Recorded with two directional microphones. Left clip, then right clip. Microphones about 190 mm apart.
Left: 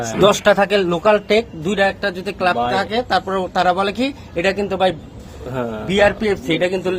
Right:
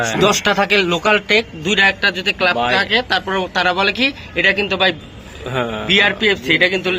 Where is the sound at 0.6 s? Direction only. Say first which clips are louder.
Even; 40° left (ahead or behind).